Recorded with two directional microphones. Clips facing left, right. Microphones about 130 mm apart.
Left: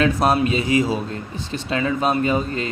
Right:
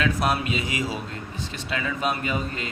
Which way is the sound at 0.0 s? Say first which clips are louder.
Left 6 dB; 35° left (ahead or behind).